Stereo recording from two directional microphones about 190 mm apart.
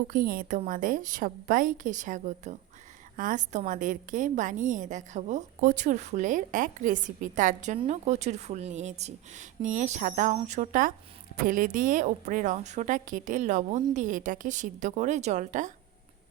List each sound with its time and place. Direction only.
0.1 s a woman's voice: 50° right (ahead or behind)